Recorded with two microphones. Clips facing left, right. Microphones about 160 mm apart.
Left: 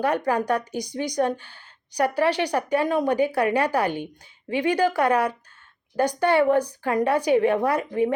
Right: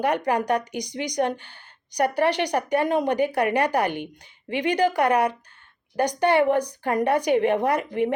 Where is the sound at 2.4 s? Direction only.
20° right (ahead or behind).